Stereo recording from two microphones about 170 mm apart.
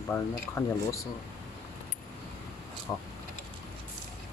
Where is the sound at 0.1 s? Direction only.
15° left (ahead or behind).